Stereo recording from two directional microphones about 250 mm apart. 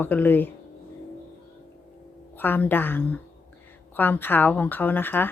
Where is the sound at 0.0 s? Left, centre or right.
Centre.